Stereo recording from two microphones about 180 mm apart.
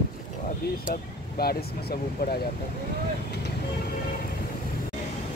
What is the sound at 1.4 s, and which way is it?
Speech, 60° left (ahead or behind).